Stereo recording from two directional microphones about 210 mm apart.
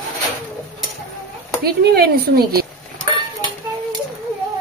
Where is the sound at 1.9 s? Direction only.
45° right (ahead or behind).